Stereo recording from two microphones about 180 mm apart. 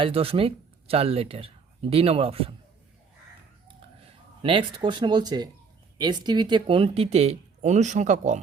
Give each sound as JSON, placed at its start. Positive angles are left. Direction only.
{"t": 0.0, "sound": "speech", "side_deg": -30}
{"t": 4.4, "sound": "speech", "side_deg": -25}